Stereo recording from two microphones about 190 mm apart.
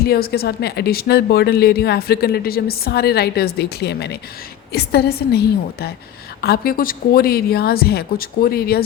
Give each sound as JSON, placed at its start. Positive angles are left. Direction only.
{"t": 0.0, "sound": "speech", "side_deg": 55}
{"t": 6.4, "sound": "a woman's voice", "side_deg": 55}